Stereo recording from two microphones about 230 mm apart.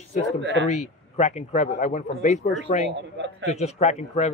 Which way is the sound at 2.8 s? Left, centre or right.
Right.